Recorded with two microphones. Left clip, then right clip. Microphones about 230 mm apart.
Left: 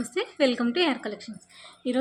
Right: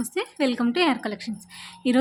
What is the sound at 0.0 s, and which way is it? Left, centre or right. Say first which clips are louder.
A woman's voice: left 1 dB; centre.